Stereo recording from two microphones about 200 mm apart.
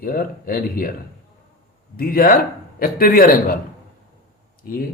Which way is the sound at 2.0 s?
45° left (ahead or behind).